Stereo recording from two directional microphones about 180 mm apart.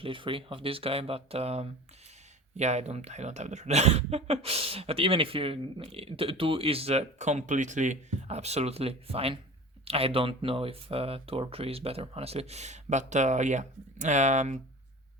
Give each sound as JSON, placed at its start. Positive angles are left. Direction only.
{"t": 0.0, "sound": "speech", "side_deg": -30}